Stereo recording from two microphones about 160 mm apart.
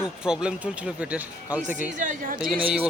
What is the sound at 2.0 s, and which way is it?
Speech, 60° right (ahead or behind).